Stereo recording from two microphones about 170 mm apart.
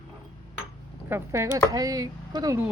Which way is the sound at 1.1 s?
15° right (ahead or behind).